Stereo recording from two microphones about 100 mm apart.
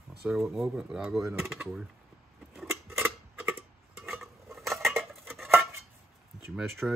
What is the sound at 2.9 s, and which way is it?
Tick-tock, 10° right (ahead or behind).